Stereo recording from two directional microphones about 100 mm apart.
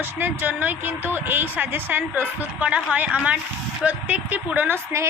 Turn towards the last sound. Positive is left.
turn(degrees=-25)  # may be behind; listen again after turning